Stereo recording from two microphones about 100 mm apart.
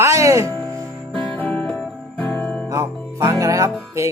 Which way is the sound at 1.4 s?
10° left (ahead or behind).